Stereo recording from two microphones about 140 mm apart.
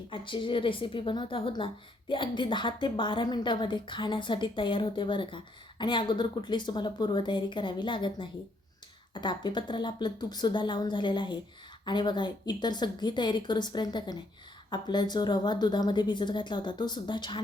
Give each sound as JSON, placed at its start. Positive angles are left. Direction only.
{"t": 0.1, "sound": "a woman's voice", "side_deg": 35}